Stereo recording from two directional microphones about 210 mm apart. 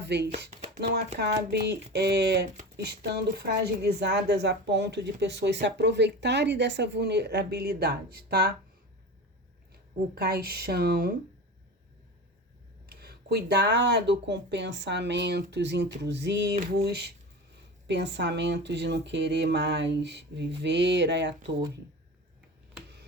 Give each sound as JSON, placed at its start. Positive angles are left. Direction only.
{"t": 0.0, "sound": "speech", "side_deg": -55}
{"t": 1.5, "sound": "a woman's voice", "side_deg": -50}
{"t": 10.2, "sound": "a woman's voice", "side_deg": -50}
{"t": 12.9, "sound": "a woman's voice", "side_deg": -45}